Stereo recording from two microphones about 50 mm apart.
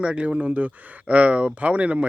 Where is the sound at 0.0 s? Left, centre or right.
Right.